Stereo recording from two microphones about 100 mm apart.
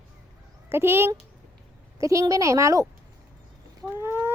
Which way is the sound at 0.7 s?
25° right (ahead or behind).